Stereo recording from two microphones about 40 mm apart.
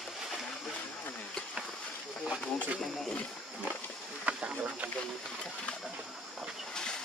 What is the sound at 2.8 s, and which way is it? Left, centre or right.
Speech, centre.